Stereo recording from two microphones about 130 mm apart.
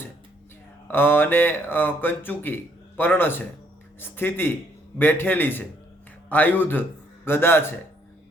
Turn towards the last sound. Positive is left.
turn(degrees=15)  # may be behind; listen again after turning